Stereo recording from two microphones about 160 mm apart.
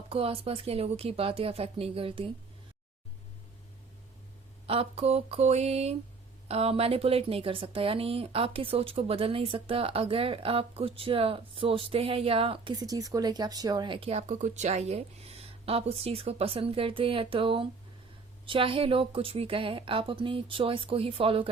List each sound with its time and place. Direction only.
0.1 s speech: 35° right (ahead or behind)
4.6 s speech: 35° right (ahead or behind)